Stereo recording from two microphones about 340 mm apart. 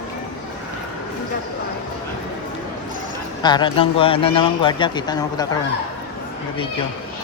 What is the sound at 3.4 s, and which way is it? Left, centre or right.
Speech, centre.